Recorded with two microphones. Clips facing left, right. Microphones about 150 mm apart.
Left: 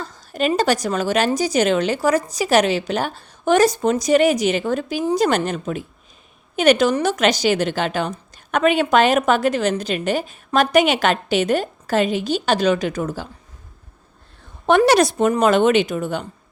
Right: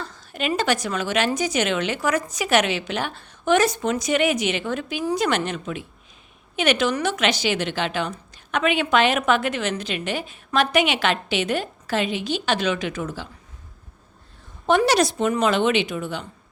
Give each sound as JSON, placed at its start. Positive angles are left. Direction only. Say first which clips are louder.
{"t": 0.0, "sound": "a woman's voice", "louder": "left 6 dB", "side_deg": 40}
{"t": 14.7, "sound": "a woman's voice", "louder": "left 4 dB", "side_deg": 55}